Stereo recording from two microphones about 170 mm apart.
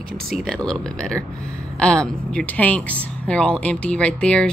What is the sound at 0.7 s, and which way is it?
Speech, 5° left (ahead or behind).